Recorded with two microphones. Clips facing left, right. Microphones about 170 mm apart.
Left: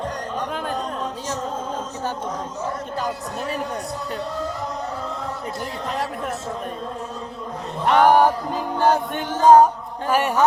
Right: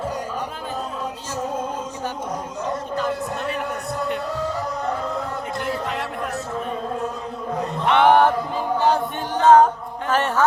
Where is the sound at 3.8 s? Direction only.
35° left (ahead or behind).